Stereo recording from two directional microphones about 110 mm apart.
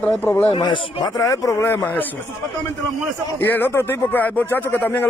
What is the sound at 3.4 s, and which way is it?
Speech, 20° left (ahead or behind).